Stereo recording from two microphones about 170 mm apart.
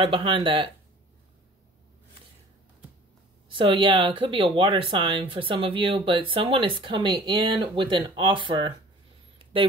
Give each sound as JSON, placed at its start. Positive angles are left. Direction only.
{"t": 0.0, "sound": "speech", "side_deg": -30}
{"t": 3.5, "sound": "speech", "side_deg": -30}
{"t": 9.4, "sound": "a sound", "side_deg": -30}